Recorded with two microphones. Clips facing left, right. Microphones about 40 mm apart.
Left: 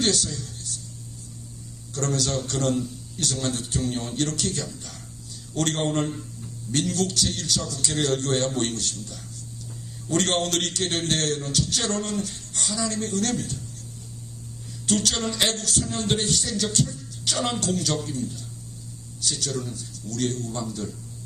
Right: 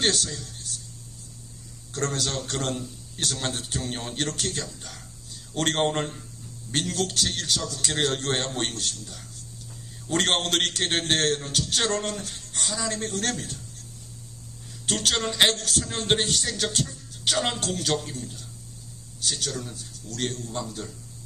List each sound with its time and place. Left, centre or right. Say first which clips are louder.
0.0 s music: left 1 dB; right
1.9 s music: left 2 dB; right
14.8 s music: left 1 dB; right
17.9 s a man's voice: even; right
19.2 s music: left 1 dB; right